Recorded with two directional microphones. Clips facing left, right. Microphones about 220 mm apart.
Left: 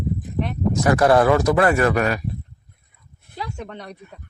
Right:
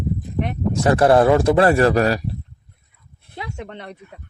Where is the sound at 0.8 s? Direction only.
30° right (ahead or behind).